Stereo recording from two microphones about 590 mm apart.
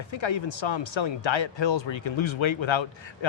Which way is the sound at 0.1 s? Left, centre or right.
Left.